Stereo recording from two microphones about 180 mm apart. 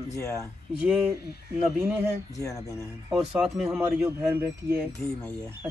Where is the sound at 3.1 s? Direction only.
Centre (ahead or behind).